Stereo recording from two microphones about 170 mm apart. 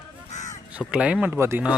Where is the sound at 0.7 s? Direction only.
5° right (ahead or behind).